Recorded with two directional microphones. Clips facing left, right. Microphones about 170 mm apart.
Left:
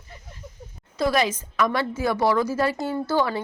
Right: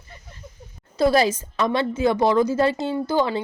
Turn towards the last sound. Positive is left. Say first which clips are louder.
# right 2 dB
turn(degrees=-20)  # may be behind; listen again after turning